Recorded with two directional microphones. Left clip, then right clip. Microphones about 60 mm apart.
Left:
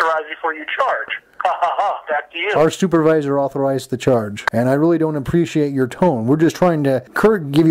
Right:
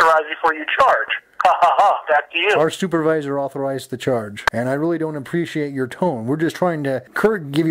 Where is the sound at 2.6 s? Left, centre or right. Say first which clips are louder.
Left 4 dB; centre.